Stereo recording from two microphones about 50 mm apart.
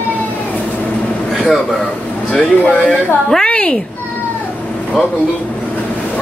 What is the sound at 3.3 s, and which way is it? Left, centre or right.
Speech, centre.